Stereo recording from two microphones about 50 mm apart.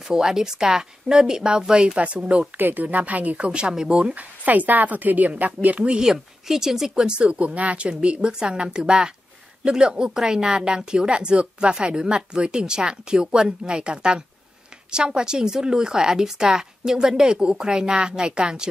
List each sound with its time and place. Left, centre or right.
0.1 s a woman's voice: centre
2.5 s speech: right; by 4.1 s centre
4.1 s speech: right
6.0 s a woman's voice: centre